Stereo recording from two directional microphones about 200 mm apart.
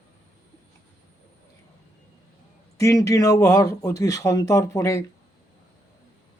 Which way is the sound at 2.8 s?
15° left (ahead or behind).